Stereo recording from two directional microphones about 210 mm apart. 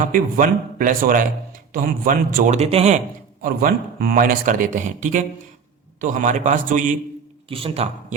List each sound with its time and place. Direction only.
0.0 s speech: 40° right (ahead or behind)
3.4 s speech: 45° right (ahead or behind)
7.5 s speech: 25° right (ahead or behind)